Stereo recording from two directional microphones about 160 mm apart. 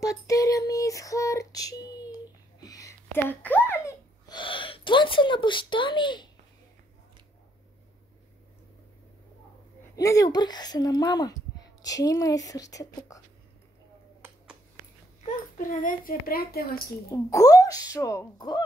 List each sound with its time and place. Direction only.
0.0 s female singing: 20° left (ahead or behind)
2.6 s a sound: 20° left (ahead or behind)
4.3 s gasp: 30° left (ahead or behind)
9.9 s a sound: 20° left (ahead or behind)
15.7 s a woman's voice: 60° left (ahead or behind)
17.1 s speech: 20° left (ahead or behind)